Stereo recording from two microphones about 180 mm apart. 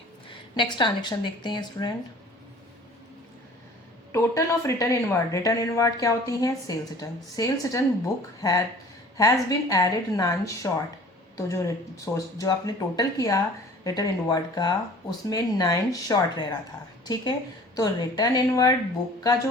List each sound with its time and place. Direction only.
0.3 s a woman's voice: 25° left (ahead or behind)
4.1 s a woman's voice: 15° left (ahead or behind)
17.7 s a woman's voice: 20° left (ahead or behind)